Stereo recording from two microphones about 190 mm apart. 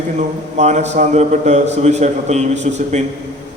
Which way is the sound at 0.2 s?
35° right (ahead or behind).